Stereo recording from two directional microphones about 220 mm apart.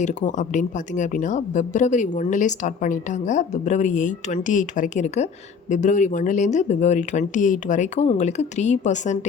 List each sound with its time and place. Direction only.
0.0 s a woman's voice: 35° left (ahead or behind)